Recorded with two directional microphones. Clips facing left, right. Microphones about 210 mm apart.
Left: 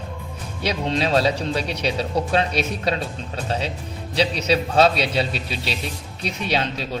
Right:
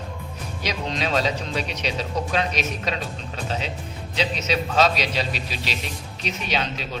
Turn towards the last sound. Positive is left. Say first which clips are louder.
# left 3 dB
turn(degrees=30)  # may be behind; listen again after turning